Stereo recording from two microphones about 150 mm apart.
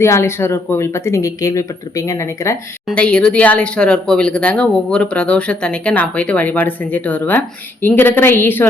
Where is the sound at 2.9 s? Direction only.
5° left (ahead or behind).